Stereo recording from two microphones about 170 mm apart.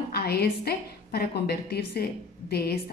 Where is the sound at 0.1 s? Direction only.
65° left (ahead or behind).